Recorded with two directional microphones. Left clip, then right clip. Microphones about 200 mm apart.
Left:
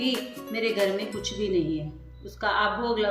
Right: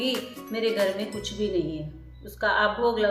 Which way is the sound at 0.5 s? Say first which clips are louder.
Right 1 dB; 15° right (ahead or behind).